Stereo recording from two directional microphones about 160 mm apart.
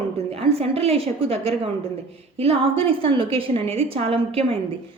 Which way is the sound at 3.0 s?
30° right (ahead or behind).